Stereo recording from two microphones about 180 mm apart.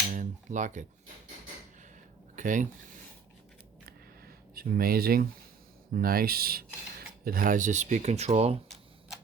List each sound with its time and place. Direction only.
0.1 s cutlery: 45° right (ahead or behind)
2.3 s speech: 45° right (ahead or behind)
4.5 s speech: 55° right (ahead or behind); by 8.5 s 35° right (ahead or behind)